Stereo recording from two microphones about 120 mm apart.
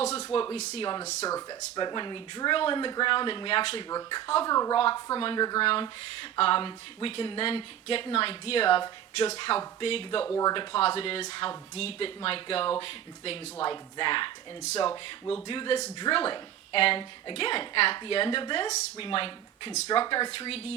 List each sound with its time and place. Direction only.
0.0 s a sound: 60° left (ahead or behind)
0.5 s speech: 60° left (ahead or behind)
1.3 s speech: 30° left (ahead or behind); by 3.8 s 50° left (ahead or behind)
3.8 s speech: 30° left (ahead or behind)
5.6 s a woman's voice: 50° left (ahead or behind)
10.2 s speech: 25° left (ahead or behind)
10.5 s a woman's voice: 45° left (ahead or behind)
15.4 s a woman's voice: 45° left (ahead or behind)